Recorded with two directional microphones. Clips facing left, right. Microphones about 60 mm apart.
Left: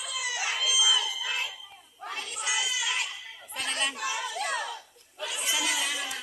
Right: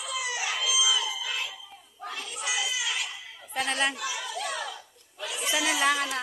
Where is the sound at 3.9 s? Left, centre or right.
Left.